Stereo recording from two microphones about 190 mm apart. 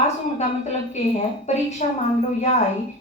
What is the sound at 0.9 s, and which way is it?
Speech, 35° left (ahead or behind).